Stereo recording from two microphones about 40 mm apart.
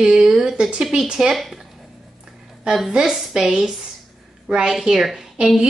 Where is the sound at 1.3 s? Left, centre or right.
Centre.